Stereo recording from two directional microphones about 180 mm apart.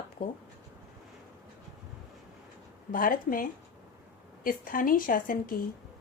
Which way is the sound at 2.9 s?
50° left (ahead or behind).